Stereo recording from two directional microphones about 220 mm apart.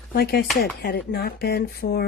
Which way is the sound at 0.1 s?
45° left (ahead or behind).